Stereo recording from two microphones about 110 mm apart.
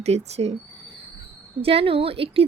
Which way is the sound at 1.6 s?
60° right (ahead or behind).